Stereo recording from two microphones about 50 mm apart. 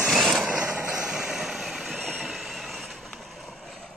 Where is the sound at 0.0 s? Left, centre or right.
Centre.